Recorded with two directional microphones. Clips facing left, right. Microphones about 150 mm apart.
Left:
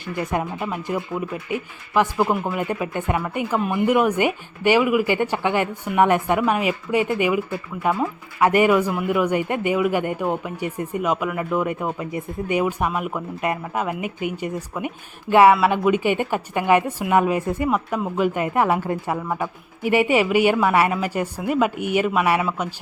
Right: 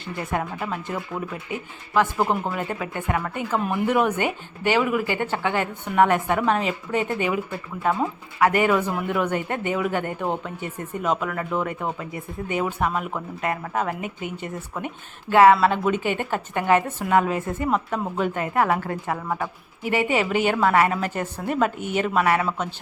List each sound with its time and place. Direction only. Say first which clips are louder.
0.2 s speech: left 3 dB; 15° left (ahead or behind)
3.6 s speech: left 3 dB; centre (ahead or behind)